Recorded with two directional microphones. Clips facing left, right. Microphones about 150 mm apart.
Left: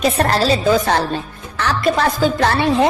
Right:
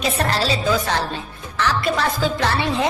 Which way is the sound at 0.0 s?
45° left (ahead or behind).